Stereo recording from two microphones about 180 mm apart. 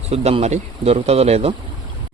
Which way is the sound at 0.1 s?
35° right (ahead or behind).